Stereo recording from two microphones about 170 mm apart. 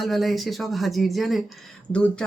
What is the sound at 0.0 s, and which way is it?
Speech, centre (ahead or behind).